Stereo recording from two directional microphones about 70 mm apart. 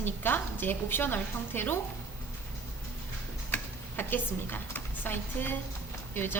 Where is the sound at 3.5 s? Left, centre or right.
Left.